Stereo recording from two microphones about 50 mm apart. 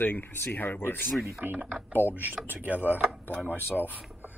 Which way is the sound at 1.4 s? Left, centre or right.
Right.